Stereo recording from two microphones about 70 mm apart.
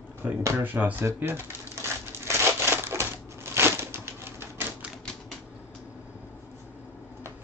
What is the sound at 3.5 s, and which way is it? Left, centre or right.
Typewriter, right.